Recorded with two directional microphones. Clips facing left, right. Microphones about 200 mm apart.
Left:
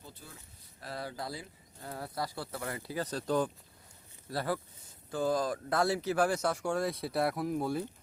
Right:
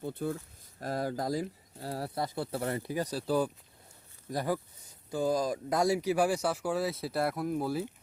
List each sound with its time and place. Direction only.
0.0 s speech: 55° right (ahead or behind)
0.8 s speech: 45° right (ahead or behind)
2.8 s speech: 15° right (ahead or behind)